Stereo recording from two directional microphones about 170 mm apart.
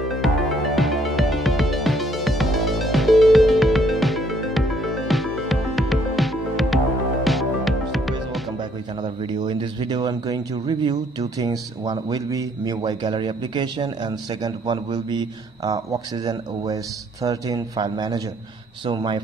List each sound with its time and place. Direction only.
0.1 s music: centre (ahead or behind)
9.0 s a sound: 25° right (ahead or behind)
11.8 s a man's voice: 20° right (ahead or behind)